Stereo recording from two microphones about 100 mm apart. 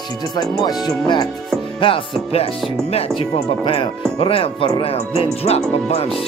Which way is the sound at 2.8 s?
90° left.